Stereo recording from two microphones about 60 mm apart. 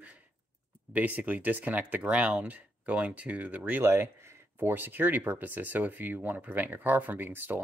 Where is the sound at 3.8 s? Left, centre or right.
Right.